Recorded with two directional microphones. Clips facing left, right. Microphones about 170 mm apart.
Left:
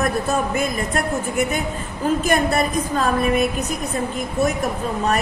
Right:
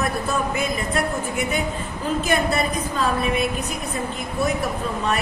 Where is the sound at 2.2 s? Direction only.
45° left (ahead or behind).